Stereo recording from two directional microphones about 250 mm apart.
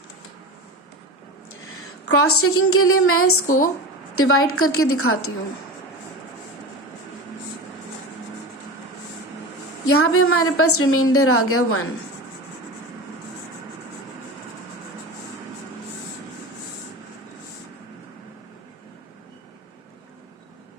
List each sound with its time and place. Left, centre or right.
1.6 s a woman's voice: left
9.8 s a woman's voice: left